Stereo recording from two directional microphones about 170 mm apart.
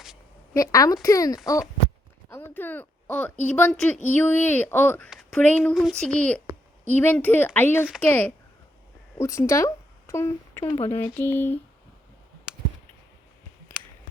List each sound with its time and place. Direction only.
0.5 s a woman's voice: 20° left (ahead or behind)
5.0 s a child's voice: centre (ahead or behind)
13.7 s clicking: 15° left (ahead or behind)